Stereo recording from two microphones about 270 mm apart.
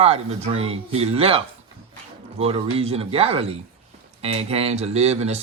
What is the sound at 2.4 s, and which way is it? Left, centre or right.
Speech, right.